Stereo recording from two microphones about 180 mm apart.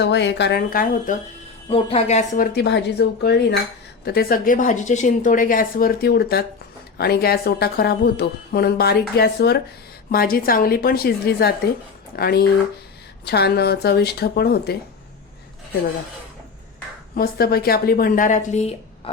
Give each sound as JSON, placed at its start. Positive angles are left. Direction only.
{"t": 0.0, "sound": "speech", "side_deg": 80}
{"t": 1.7, "sound": "a woman's voice", "side_deg": 35}
{"t": 17.2, "sound": "speech", "side_deg": 60}